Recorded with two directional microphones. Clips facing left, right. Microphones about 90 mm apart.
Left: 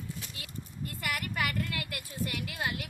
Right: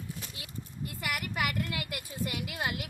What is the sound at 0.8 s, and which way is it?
A woman's voice, 5° right (ahead or behind).